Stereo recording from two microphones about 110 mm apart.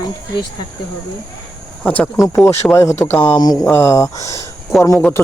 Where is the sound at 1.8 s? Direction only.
15° left (ahead or behind).